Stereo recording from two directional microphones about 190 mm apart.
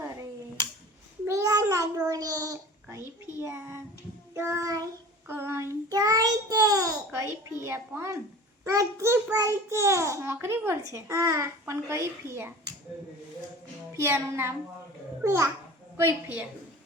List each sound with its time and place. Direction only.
0.0 s finger snapping: 15° right (ahead or behind)
1.3 s a sound: 15° right (ahead or behind)
3.4 s child singing: 15° right (ahead or behind)
7.6 s a woman's voice: 15° right (ahead or behind)
13.9 s a child's voice: 15° right (ahead or behind)